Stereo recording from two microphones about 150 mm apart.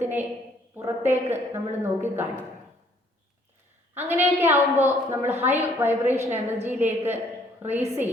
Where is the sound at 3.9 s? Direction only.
15° right (ahead or behind).